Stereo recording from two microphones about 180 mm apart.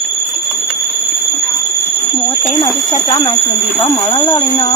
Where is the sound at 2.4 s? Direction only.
20° left (ahead or behind).